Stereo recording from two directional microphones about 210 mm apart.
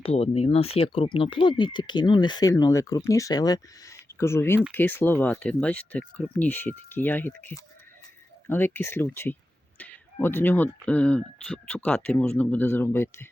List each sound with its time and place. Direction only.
0.0 s speech: 30° left (ahead or behind); by 13.2 s 10° left (ahead or behind)